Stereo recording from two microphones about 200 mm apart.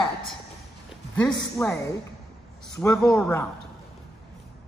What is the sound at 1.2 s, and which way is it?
Speech, 20° left (ahead or behind).